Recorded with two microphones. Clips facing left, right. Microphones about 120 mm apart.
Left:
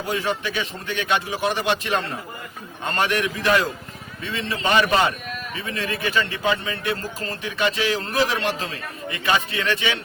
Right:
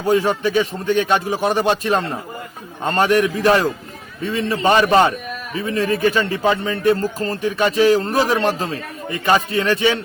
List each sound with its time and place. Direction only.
0.1 s speech: 45° right (ahead or behind)